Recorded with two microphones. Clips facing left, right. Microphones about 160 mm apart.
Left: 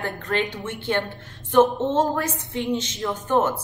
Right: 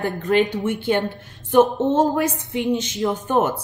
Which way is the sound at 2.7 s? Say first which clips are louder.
Right 5 dB; 20° right (ahead or behind).